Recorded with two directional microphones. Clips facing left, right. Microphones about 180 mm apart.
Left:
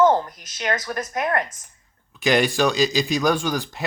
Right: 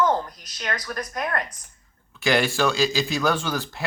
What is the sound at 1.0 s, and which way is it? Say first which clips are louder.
Speech: left 2 dB; 25° left (ahead or behind).